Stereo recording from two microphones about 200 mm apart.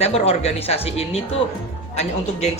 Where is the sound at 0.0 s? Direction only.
30° left (ahead or behind).